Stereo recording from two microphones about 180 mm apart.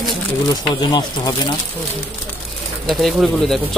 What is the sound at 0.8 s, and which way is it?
Speech, 25° left (ahead or behind).